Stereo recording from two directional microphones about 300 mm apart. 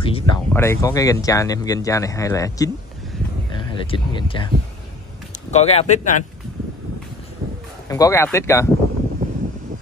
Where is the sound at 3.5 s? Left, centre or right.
Centre.